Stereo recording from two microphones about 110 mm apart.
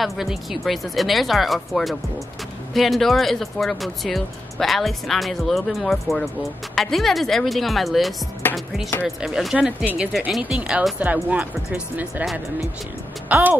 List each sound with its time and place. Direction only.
0.0 s speech: centre (ahead or behind)
8.4 s music: 20° left (ahead or behind)
9.0 s speech: 5° right (ahead or behind)
13.3 s speech: 15° right (ahead or behind)